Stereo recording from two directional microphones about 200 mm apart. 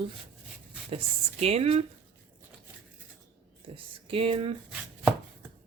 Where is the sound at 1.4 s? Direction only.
30° right (ahead or behind).